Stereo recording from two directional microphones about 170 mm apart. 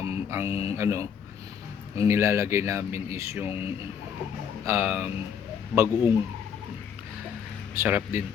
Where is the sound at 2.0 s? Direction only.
15° right (ahead or behind).